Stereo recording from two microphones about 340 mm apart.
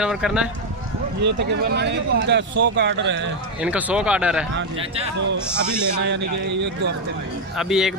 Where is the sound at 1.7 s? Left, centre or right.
Right.